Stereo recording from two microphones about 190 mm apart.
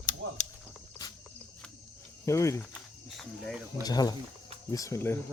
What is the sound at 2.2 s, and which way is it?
Speech, 15° left (ahead or behind).